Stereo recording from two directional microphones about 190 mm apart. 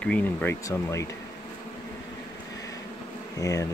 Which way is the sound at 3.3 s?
15° left (ahead or behind).